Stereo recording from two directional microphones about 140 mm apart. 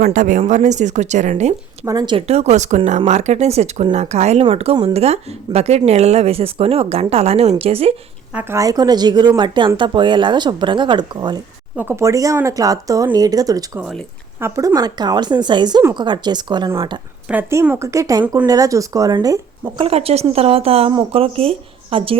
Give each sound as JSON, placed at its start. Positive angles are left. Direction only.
{"t": 0.0, "sound": "speech", "side_deg": -70}
{"t": 1.8, "sound": "speech", "side_deg": -25}
{"t": 2.1, "sound": "speech", "side_deg": -50}
{"t": 8.3, "sound": "a woman's voice", "side_deg": -10}
{"t": 8.5, "sound": "speech", "side_deg": -25}
{"t": 11.8, "sound": "speech", "side_deg": -15}
{"t": 17.5, "sound": "speech", "side_deg": -20}
{"t": 19.8, "sound": "speech", "side_deg": -45}